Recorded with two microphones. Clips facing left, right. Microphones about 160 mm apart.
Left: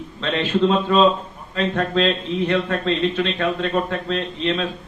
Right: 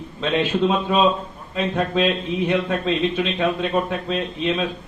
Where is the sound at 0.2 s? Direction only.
10° right (ahead or behind).